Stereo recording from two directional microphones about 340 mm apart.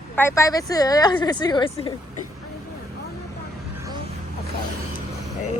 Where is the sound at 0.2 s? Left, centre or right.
Centre.